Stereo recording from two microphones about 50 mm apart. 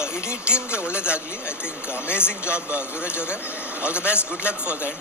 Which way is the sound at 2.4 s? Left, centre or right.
Right.